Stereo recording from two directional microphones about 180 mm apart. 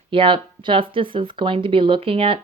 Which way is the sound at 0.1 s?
30° right (ahead or behind).